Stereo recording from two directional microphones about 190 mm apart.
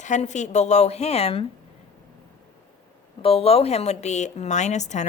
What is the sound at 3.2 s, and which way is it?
A woman's voice, 30° left (ahead or behind).